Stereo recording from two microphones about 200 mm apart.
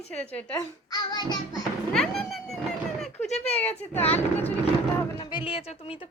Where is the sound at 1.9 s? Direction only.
Centre (ahead or behind).